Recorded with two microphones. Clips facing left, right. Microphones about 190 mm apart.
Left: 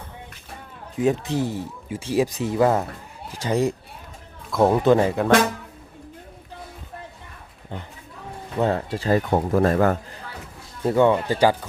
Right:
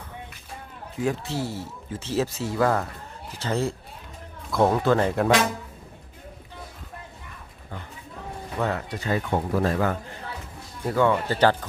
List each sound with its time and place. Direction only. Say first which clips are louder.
0.9 s speech: left 5 dB; 20° left (ahead or behind)
5.0 s speech: left 1 dB; centre (ahead or behind)
8.5 s speech: left 5 dB; 25° left (ahead or behind); by 10.0 s 50° left (ahead or behind)
10.8 s speech: left 4 dB; 25° left (ahead or behind)